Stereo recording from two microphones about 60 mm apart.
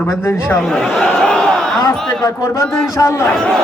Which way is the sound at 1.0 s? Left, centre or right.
Centre.